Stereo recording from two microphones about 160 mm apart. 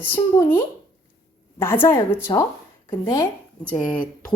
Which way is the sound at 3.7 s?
5° left (ahead or behind).